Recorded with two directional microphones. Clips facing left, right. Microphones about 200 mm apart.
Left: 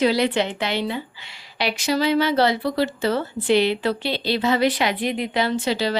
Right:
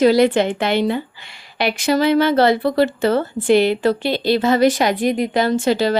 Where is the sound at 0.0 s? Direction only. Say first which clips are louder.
Right 6 dB; 45° right (ahead or behind).